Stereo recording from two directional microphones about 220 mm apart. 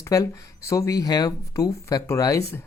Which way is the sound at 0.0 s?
15° left (ahead or behind).